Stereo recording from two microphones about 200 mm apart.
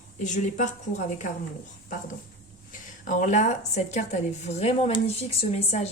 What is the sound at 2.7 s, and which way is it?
A woman's voice, 40° left (ahead or behind).